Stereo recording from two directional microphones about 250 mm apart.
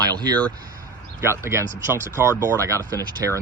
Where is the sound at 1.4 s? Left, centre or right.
Centre.